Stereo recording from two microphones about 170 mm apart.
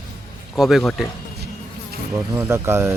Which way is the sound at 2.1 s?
15° right (ahead or behind).